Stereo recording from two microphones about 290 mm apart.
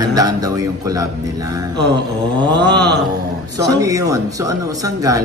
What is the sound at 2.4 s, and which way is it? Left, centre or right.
Speech, right.